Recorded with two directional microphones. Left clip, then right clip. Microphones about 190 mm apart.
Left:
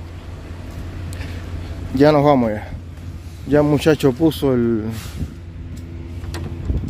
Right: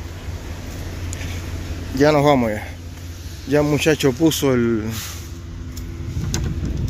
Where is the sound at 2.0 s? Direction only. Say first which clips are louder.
Left 2 dB; 20° left (ahead or behind).